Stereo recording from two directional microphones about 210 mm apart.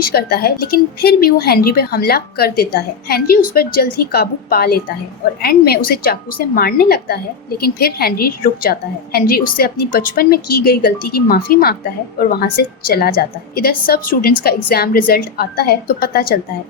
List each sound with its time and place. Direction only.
0.0 s a woman's voice: 45° left (ahead or behind)